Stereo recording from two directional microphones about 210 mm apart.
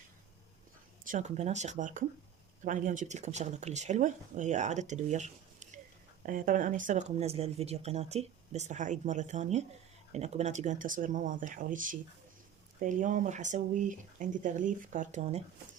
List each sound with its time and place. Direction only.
1.0 s speech: 35° right (ahead or behind)